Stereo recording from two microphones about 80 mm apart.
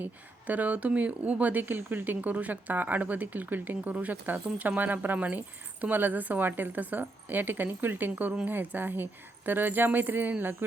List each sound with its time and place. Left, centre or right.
0.0 s speech: centre